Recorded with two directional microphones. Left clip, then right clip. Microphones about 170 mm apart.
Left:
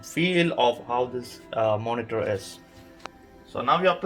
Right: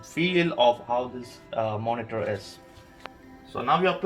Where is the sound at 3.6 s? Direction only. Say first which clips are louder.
Left 2 dB; 15° right (ahead or behind).